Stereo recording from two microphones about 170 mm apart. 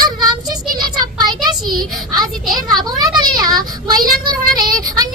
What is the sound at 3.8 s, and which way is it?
Child singing, 25° right (ahead or behind).